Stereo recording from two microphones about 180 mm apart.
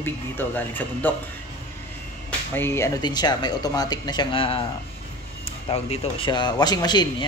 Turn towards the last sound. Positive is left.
turn(degrees=25)  # may be behind; listen again after turning